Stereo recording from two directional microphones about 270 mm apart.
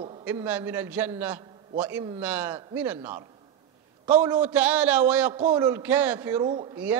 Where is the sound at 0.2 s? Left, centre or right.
Centre.